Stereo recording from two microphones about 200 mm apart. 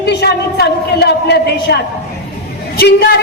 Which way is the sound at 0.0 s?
55° left (ahead or behind).